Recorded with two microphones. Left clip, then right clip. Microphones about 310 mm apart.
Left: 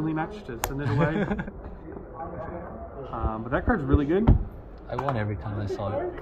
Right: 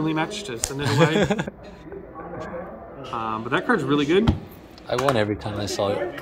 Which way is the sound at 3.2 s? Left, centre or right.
Centre.